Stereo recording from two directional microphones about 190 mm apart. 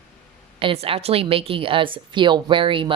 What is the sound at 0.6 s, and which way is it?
Speech, 30° right (ahead or behind).